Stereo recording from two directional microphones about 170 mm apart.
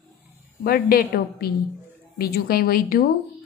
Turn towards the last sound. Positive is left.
turn(degrees=60)  # may be behind; listen again after turning